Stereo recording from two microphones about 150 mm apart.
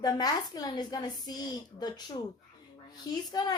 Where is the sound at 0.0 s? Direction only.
25° left (ahead or behind).